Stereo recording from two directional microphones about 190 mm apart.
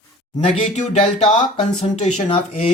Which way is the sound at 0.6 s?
35° left (ahead or behind).